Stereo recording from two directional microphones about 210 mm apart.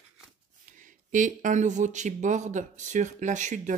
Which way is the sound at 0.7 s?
40° right (ahead or behind).